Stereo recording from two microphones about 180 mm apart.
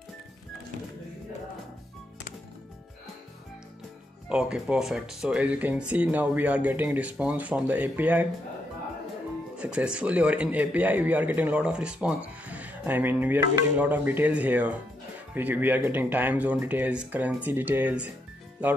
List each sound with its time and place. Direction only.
4.3 s a man's voice: 5° right (ahead or behind)
9.6 s a man's voice: 5° right (ahead or behind)